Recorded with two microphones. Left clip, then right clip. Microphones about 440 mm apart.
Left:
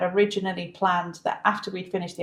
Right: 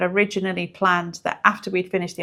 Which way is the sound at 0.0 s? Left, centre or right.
Right.